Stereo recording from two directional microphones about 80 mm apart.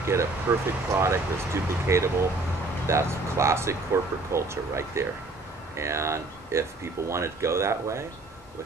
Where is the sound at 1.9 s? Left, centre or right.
Right.